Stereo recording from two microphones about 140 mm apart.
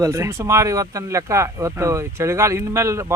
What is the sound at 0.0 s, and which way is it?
Speech, 20° right (ahead or behind).